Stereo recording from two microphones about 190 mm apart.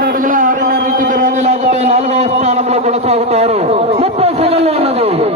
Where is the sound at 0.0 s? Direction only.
45° right (ahead or behind).